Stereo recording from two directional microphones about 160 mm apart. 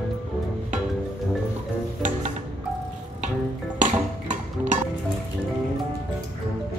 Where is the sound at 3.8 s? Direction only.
50° right (ahead or behind).